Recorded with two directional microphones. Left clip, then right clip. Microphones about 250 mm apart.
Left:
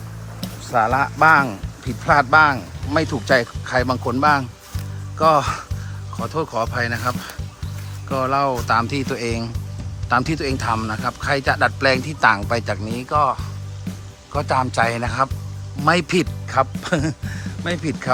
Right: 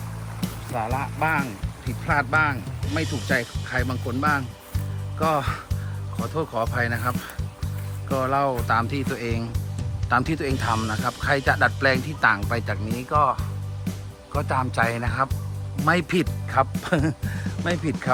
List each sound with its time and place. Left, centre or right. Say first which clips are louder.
0.4 s speech: left 10 dB; centre
13.9 s music: even; centre
14.3 s speech: left 5 dB; centre